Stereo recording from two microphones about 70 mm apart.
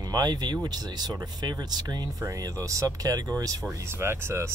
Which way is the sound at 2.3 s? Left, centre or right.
Right.